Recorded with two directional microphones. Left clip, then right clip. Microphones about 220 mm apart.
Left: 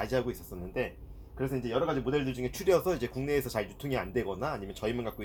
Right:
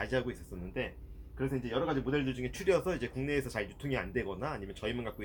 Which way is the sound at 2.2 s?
20° left (ahead or behind).